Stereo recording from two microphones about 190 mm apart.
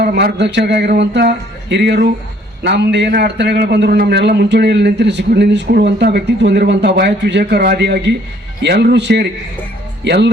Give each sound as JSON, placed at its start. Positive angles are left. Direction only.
{"t": 0.0, "sound": "speech", "side_deg": -55}